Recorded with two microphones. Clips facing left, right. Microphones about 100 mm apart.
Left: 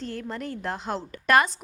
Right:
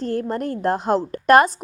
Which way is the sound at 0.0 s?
45° right (ahead or behind).